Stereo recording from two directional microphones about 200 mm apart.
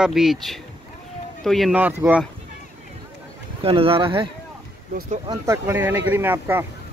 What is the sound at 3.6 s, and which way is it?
Speech, 25° right (ahead or behind).